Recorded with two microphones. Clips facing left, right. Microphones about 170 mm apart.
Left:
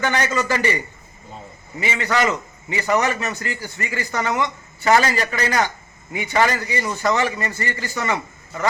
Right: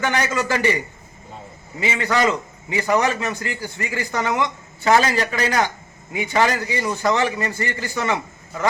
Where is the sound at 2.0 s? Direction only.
15° right (ahead or behind).